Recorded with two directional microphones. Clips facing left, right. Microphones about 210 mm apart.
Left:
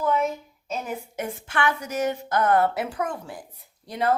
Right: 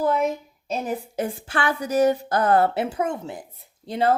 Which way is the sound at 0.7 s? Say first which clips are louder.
Right 4 dB; 35° right (ahead or behind).